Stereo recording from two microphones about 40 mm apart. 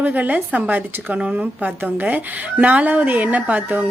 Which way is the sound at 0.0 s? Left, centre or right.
Right.